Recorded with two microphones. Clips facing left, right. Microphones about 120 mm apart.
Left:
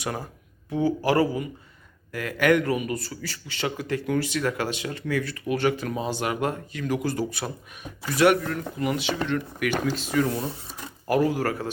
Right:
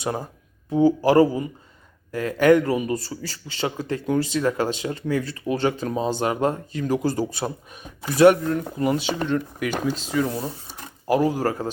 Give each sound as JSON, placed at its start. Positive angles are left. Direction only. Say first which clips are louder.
{"t": 0.0, "sound": "a man's voice", "louder": "right 4 dB", "side_deg": -25}
{"t": 9.2, "sound": "a man's voice", "louder": "right 2 dB", "side_deg": -25}
{"t": 10.1, "sound": "speech", "louder": "left 1 dB", "side_deg": -15}
{"t": 11.0, "sound": "a sound", "louder": "right 2 dB", "side_deg": -15}
{"t": 11.3, "sound": "speech", "louder": "right 3 dB", "side_deg": -15}